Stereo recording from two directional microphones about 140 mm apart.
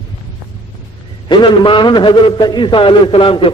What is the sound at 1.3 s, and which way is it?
A man's voice, 35° left (ahead or behind).